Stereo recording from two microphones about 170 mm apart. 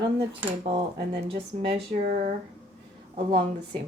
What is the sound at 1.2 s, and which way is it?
Speech, 35° right (ahead or behind).